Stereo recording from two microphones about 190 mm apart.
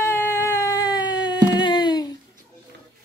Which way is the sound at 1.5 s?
25° left (ahead or behind).